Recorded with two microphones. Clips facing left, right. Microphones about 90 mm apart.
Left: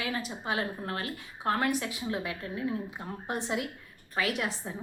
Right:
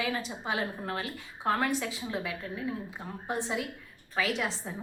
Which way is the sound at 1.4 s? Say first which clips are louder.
Even; 5° left (ahead or behind).